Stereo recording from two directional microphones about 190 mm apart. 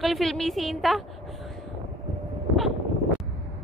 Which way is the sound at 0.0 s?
Centre (ahead or behind).